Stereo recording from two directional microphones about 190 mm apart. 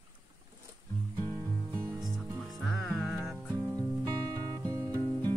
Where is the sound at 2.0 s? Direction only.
Centre (ahead or behind).